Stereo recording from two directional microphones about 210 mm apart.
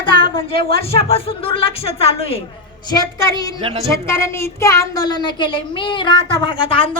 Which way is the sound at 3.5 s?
25° right (ahead or behind).